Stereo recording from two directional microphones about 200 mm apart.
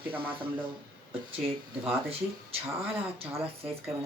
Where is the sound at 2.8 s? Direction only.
30° right (ahead or behind).